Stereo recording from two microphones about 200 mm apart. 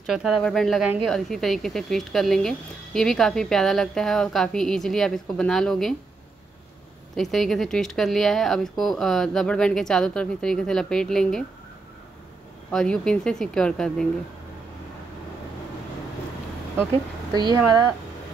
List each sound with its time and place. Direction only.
0.0 s speech: centre (ahead or behind)
7.2 s speech: centre (ahead or behind)
12.7 s speech: 5° left (ahead or behind)
17.3 s speech: 20° right (ahead or behind)